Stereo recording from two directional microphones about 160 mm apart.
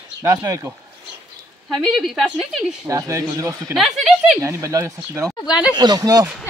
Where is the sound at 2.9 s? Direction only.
20° right (ahead or behind).